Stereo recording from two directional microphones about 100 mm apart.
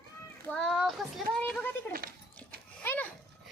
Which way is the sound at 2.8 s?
20° left (ahead or behind).